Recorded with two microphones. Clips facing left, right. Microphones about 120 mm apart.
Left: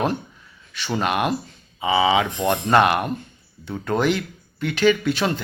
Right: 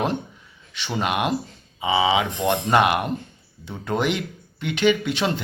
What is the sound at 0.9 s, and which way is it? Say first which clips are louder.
A man's voice: left 1 dB; 15° right (ahead or behind).